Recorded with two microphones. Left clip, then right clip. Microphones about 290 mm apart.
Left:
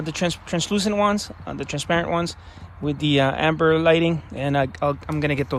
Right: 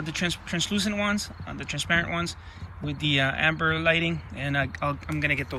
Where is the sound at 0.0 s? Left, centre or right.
Centre.